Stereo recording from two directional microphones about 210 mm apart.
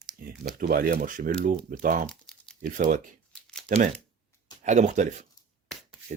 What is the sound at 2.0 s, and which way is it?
Crumpling, 5° left (ahead or behind).